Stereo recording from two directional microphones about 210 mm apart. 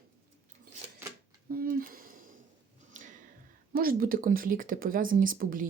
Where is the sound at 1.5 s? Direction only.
45° right (ahead or behind).